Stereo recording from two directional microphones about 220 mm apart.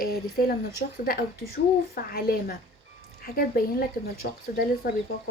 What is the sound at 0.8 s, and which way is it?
Speech, 40° left (ahead or behind).